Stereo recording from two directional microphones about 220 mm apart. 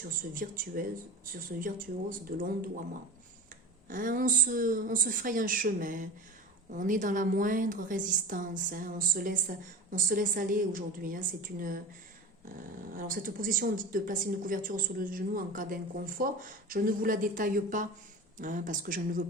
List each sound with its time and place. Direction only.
0.0 s speech: 40° right (ahead or behind)
3.8 s speech: 40° right (ahead or behind)